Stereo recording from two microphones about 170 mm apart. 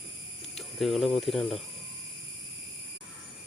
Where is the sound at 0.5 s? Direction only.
Centre (ahead or behind).